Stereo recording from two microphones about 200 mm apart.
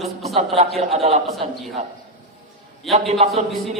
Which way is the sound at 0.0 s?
Centre (ahead or behind).